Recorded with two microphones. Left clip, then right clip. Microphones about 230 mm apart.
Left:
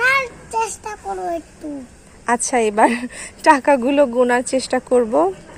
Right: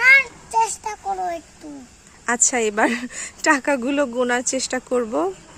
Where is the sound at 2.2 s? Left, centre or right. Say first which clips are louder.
Left 3 dB; centre.